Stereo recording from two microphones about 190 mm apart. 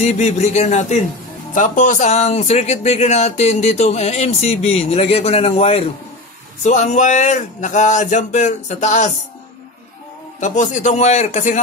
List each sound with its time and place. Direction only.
0.0 s speech: 35° left (ahead or behind)
10.4 s speech: 40° left (ahead or behind)